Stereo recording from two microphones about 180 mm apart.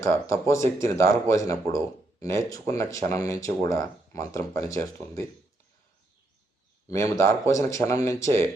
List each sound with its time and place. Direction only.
0.0 s speech: 15° left (ahead or behind)
6.8 s speech: 15° left (ahead or behind)